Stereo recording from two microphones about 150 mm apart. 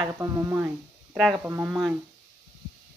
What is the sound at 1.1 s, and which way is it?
Speech, centre (ahead or behind).